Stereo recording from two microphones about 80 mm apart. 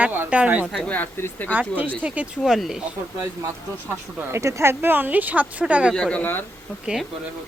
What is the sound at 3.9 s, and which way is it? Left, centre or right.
Speech, right.